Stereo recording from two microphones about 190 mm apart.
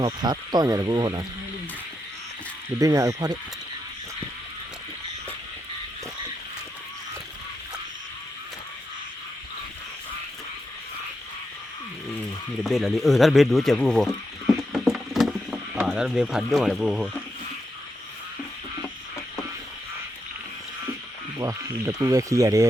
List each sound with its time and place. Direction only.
0.0 s speech: 20° right (ahead or behind)
2.7 s speech: 15° right (ahead or behind)
12.6 s speech: centre (ahead or behind)
21.4 s speech: 15° right (ahead or behind)